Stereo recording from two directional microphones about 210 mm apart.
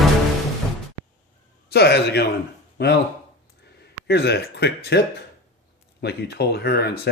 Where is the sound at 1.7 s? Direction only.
50° left (ahead or behind).